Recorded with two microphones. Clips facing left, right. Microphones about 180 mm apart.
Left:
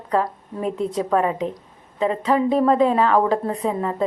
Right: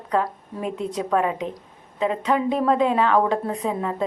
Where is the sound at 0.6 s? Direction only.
40° left (ahead or behind).